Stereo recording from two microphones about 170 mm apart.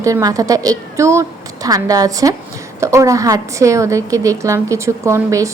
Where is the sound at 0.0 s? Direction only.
20° right (ahead or behind).